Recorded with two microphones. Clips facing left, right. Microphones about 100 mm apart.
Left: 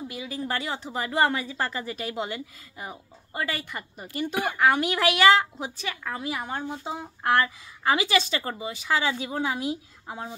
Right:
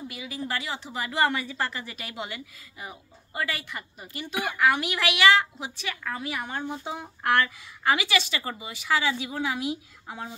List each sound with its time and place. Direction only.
0.1 s a woman's voice: 35° left (ahead or behind)
6.0 s a woman's voice: 25° left (ahead or behind)